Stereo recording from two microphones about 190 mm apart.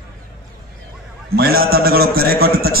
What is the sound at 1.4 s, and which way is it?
A man's voice, 55° right (ahead or behind).